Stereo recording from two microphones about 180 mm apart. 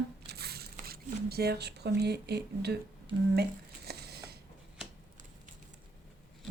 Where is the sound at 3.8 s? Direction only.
60° right (ahead or behind).